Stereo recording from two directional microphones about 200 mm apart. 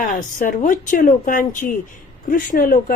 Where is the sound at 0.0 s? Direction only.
40° left (ahead or behind).